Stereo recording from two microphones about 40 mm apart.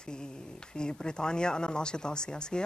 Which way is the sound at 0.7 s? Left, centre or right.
Left.